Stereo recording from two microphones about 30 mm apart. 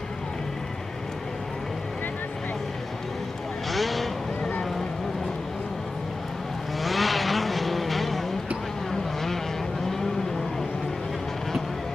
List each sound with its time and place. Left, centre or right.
3.7 s vehicle: centre
6.8 s vehicle: centre